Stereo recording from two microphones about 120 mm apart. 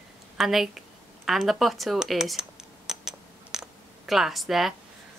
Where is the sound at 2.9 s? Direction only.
5° right (ahead or behind).